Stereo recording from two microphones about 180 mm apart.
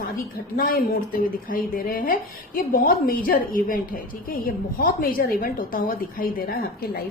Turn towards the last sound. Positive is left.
turn(degrees=55)  # may be behind; listen again after turning